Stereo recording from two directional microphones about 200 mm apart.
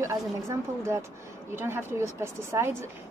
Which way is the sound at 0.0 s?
15° right (ahead or behind).